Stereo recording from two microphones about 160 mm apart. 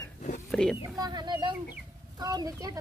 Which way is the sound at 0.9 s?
25° right (ahead or behind).